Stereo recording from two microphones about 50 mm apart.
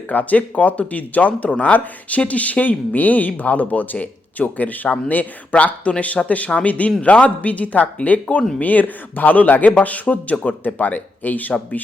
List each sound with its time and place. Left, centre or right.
0.1 s speech: left